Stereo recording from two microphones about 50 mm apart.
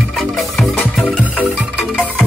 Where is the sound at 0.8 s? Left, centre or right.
Left.